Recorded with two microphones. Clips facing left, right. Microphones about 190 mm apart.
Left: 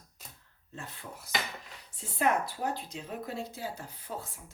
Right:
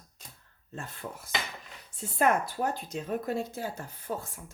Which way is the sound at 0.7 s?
50° right (ahead or behind).